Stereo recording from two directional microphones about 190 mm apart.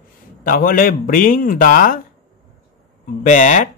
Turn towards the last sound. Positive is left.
turn(degrees=40)  # may be behind; listen again after turning